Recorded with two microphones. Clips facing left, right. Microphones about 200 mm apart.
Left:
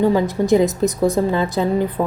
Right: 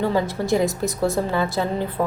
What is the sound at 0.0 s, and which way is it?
A woman's voice, 15° left (ahead or behind).